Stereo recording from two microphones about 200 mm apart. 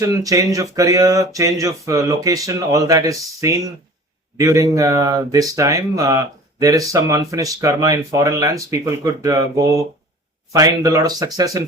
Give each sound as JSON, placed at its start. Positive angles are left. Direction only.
{"t": 0.0, "sound": "speech", "side_deg": -15}